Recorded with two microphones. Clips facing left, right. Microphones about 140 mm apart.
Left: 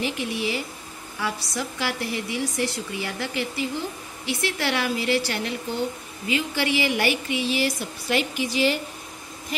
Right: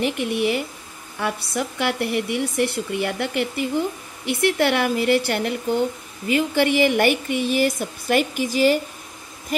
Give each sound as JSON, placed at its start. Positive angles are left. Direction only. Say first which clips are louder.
{"t": 0.0, "sound": "speech", "louder": "right 5 dB", "side_deg": -55}